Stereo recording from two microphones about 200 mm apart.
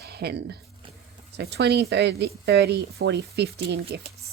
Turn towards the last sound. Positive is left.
turn(degrees=-55)  # may be behind; listen again after turning